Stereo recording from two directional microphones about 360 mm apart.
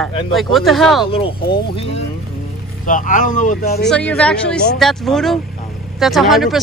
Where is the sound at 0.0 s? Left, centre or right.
Centre.